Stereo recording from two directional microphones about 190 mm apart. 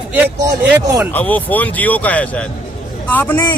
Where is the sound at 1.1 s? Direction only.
10° left (ahead or behind).